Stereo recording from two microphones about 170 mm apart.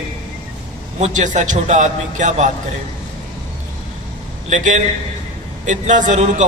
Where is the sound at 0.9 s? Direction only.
45° right (ahead or behind).